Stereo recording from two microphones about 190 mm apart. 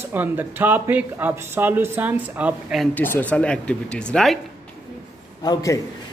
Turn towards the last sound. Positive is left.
turn(degrees=20)  # may be behind; listen again after turning